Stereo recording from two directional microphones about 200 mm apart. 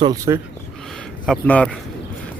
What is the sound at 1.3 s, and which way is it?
Speech, 5° left (ahead or behind).